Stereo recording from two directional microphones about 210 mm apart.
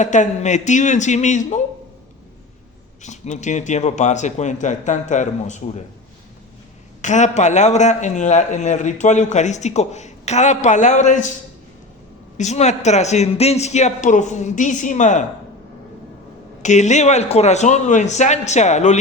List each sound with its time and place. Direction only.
0.0 s a man's voice: 35° left (ahead or behind)
3.0 s a man's voice: 35° left (ahead or behind)
7.0 s a man's voice: 35° left (ahead or behind)
12.4 s a man's voice: 35° left (ahead or behind)
16.6 s a man's voice: 35° left (ahead or behind)